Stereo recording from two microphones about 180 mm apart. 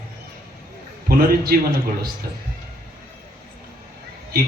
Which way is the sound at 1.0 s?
55° right (ahead or behind).